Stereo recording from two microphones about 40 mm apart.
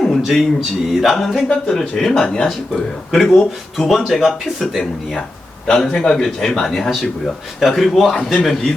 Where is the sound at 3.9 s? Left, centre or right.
Centre.